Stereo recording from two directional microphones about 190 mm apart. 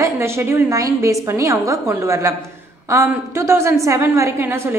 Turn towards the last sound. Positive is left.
turn(degrees=-10)  # may be behind; listen again after turning